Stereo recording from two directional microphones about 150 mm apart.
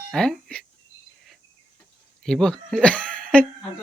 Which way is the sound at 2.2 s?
5° left (ahead or behind).